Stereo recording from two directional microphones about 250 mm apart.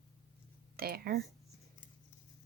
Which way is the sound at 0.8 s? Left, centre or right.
Right.